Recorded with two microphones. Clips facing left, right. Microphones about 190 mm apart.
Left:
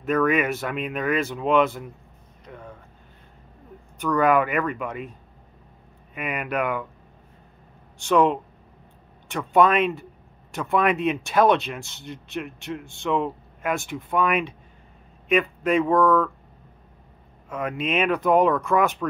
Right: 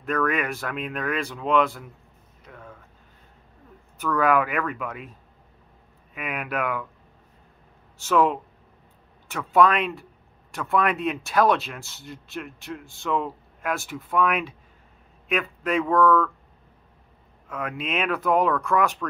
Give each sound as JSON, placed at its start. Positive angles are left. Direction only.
{"t": 0.0, "sound": "speech", "side_deg": 5}
{"t": 4.0, "sound": "speech", "side_deg": 0}
{"t": 6.1, "sound": "speech", "side_deg": 0}
{"t": 8.0, "sound": "speech", "side_deg": -5}
{"t": 17.5, "sound": "speech", "side_deg": 0}